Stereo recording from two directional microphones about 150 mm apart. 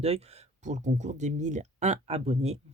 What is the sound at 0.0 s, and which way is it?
Speech, 45° right (ahead or behind).